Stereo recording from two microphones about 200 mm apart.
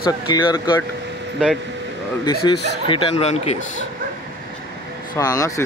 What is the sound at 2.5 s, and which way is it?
Speech, 25° left (ahead or behind).